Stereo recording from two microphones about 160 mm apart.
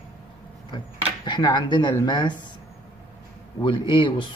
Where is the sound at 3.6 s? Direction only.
30° left (ahead or behind).